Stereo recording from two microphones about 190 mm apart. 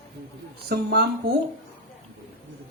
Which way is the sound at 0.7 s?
60° right (ahead or behind).